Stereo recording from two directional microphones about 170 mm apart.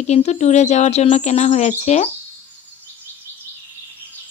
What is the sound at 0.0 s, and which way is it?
Speech, 40° left (ahead or behind).